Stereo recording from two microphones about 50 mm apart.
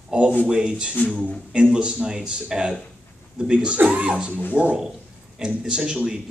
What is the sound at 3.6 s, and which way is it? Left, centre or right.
A man's voice, right.